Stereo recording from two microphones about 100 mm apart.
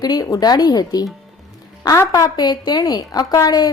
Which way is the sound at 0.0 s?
40° left (ahead or behind).